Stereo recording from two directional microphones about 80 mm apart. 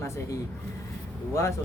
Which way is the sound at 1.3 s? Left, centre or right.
Left.